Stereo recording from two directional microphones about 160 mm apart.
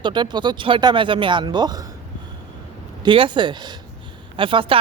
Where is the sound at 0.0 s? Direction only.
30° right (ahead or behind).